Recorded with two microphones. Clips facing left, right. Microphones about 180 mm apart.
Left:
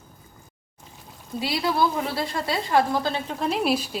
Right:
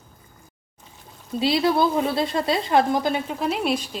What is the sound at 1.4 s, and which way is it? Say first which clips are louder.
A woman's voice: right 4 dB; 25° right (ahead or behind).